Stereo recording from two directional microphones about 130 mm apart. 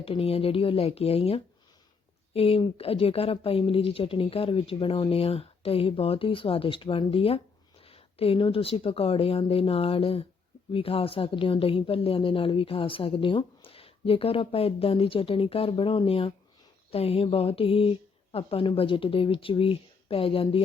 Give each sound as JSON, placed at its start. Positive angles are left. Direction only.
{"t": 0.0, "sound": "a woman's voice", "side_deg": 45}
{"t": 7.9, "sound": "a sound", "side_deg": 45}
{"t": 8.4, "sound": "a woman's voice", "side_deg": 45}